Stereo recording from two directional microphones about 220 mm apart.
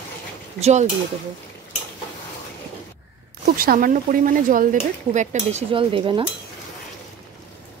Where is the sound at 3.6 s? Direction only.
40° right (ahead or behind); by 6.2 s 25° right (ahead or behind).